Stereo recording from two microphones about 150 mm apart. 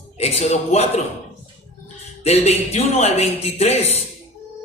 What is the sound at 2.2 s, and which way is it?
A man's voice, 45° left (ahead or behind).